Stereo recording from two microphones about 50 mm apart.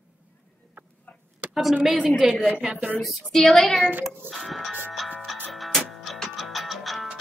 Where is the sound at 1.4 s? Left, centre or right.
Right.